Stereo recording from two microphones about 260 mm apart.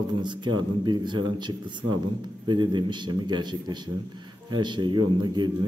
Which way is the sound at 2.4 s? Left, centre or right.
Centre.